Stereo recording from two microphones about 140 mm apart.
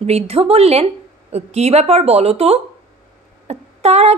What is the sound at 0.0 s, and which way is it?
A woman's voice, 45° right (ahead or behind).